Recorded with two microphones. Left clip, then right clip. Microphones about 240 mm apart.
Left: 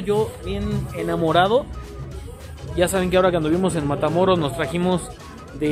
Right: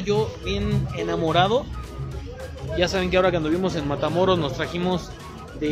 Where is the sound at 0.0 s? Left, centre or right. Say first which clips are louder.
Left 2 dB; centre.